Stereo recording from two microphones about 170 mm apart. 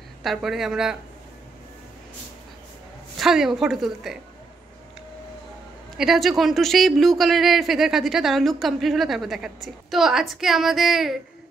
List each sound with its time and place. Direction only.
0.2 s speech: centre (ahead or behind)
3.2 s speech: centre (ahead or behind)
5.9 s speech: centre (ahead or behind)